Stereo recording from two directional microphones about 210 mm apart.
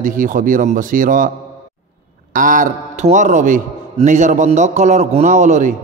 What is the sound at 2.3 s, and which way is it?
A man's voice, 40° right (ahead or behind).